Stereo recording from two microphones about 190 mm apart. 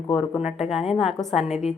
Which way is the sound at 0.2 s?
Centre (ahead or behind).